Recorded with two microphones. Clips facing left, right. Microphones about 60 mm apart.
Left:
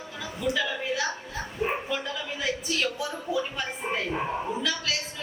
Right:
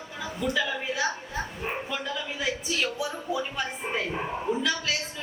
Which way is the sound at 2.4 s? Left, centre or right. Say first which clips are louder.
Left 1 dB; centre.